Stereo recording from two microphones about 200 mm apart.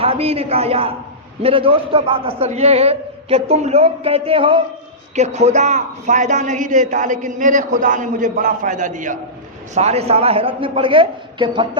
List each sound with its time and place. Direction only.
0.0 s a man's voice: 30° right (ahead or behind)